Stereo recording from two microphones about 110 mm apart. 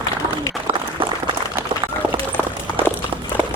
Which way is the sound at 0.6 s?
55° right (ahead or behind).